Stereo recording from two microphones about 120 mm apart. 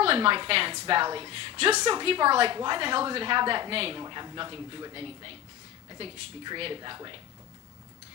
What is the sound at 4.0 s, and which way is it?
A man's voice, 35° right (ahead or behind).